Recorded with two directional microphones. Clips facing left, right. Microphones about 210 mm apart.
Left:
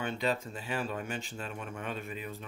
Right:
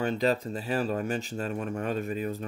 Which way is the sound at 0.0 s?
40° right (ahead or behind).